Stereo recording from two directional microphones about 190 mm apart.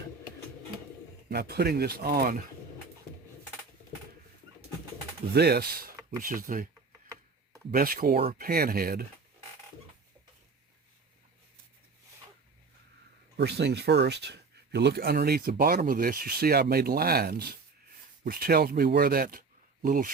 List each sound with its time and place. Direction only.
1.3 s speech: 55° right (ahead or behind)
5.3 s speech: 55° right (ahead or behind)
7.7 s speech: 50° right (ahead or behind)
13.3 s speech: 60° right (ahead or behind); by 20.1 s 45° right (ahead or behind)